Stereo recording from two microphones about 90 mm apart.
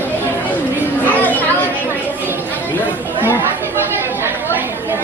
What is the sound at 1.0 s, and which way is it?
Chatter, 20° left (ahead or behind).